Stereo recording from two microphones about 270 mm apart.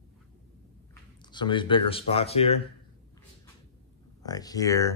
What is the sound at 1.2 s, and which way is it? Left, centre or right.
Speech, centre.